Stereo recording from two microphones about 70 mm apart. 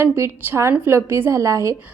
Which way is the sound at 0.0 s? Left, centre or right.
Right.